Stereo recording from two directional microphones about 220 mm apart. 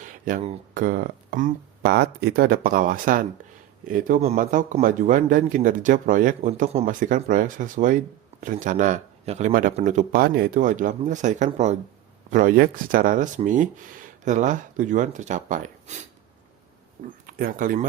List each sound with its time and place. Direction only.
0.0 s a man's voice: 35° right (ahead or behind)
17.2 s speech: 40° right (ahead or behind)